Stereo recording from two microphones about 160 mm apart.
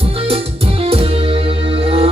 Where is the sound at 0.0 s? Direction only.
35° right (ahead or behind).